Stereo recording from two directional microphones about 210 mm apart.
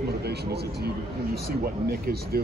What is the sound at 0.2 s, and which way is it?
Speech, 50° right (ahead or behind).